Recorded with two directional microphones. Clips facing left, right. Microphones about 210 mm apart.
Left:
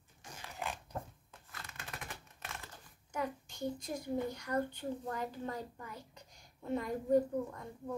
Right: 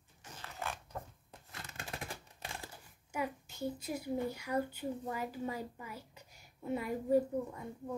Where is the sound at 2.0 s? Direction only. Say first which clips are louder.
Right 3 dB; 30° right (ahead or behind).